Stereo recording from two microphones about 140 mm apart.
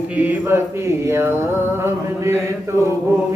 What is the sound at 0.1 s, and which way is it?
Mantra, 10° right (ahead or behind).